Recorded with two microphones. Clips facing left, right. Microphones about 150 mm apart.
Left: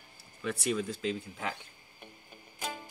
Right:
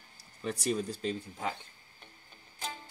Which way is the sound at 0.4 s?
35° right (ahead or behind).